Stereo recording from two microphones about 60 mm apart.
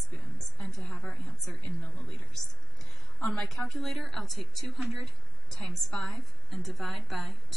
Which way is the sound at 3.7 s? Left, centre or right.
Centre.